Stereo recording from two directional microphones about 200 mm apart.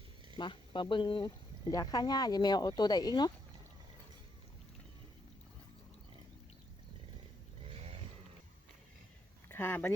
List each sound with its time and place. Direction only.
0.3 s speech: 25° left (ahead or behind)
7.7 s a sound: 30° right (ahead or behind)
9.5 s speech: 10° left (ahead or behind)